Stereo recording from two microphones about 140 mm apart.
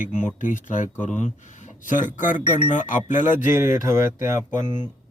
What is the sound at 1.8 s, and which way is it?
Speech, 65° left (ahead or behind).